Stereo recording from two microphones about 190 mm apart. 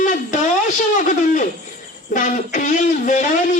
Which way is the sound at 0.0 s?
40° left (ahead or behind).